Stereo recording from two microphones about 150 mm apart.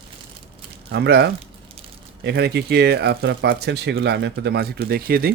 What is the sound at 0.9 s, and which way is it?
Speech, 90° right.